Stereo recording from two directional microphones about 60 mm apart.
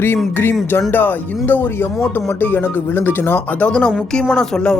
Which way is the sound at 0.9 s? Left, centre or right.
Left.